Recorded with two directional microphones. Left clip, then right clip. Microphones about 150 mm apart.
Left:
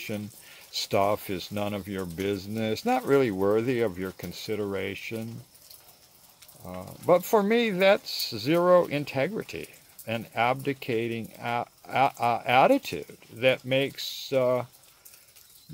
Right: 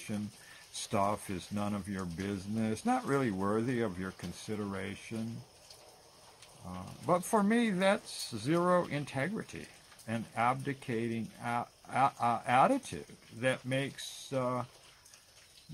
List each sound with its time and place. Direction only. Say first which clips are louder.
0.8 s speech: left 7 dB; 15° left (ahead or behind)
6.6 s speech: left 8 dB; 15° left (ahead or behind)